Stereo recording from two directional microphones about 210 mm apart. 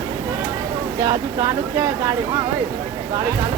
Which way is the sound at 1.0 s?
20° right (ahead or behind).